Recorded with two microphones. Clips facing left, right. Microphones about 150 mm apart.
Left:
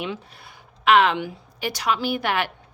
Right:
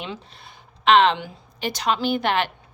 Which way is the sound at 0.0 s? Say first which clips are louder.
Left 3 dB; 10° left (ahead or behind).